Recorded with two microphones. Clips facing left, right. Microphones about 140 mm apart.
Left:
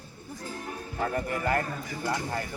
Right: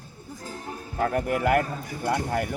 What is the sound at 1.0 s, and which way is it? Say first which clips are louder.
Speech: right 5 dB; 70° right (ahead or behind).